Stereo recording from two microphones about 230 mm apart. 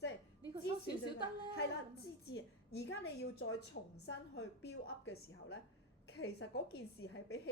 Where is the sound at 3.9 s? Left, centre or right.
Left.